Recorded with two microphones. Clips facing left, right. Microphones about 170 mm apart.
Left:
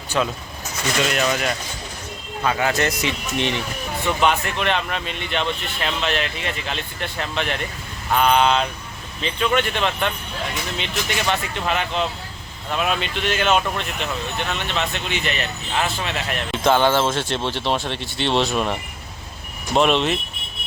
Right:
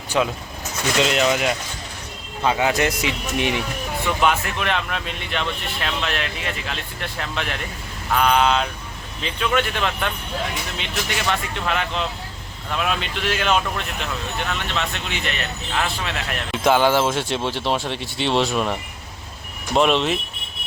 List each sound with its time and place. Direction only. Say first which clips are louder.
0.1 s speech: right 1 dB; 15° right (ahead or behind)
11.3 s speech: even; centre (ahead or behind)